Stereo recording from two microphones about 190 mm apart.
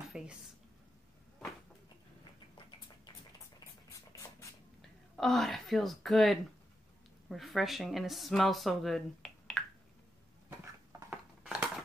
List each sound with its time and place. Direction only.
0.1 s a woman's voice: 5° right (ahead or behind)
4.1 s writing: 15° left (ahead or behind)
5.1 s speech: centre (ahead or behind)
11.1 s crushing: 5° right (ahead or behind)